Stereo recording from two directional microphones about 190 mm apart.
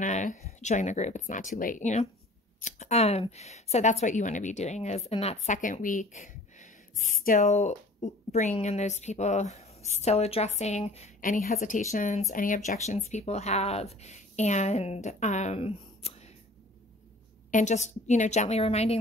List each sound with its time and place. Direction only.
0.0 s speech: 40° left (ahead or behind)
17.5 s speech: 40° left (ahead or behind)